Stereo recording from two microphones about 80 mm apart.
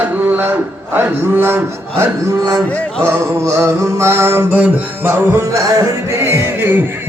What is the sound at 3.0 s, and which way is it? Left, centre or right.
Music, right.